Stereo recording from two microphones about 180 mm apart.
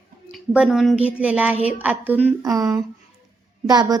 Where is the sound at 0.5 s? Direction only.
5° right (ahead or behind).